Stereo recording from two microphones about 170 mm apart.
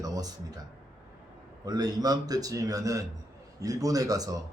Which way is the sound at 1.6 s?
20° right (ahead or behind).